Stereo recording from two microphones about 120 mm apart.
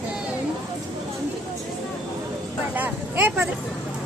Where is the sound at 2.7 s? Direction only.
15° right (ahead or behind).